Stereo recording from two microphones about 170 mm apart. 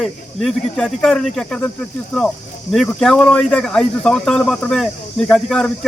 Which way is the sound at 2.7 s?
5° left (ahead or behind).